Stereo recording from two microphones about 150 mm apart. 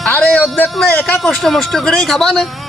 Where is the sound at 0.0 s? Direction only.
5° left (ahead or behind).